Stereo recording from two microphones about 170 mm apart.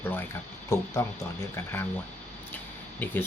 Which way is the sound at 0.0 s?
10° left (ahead or behind).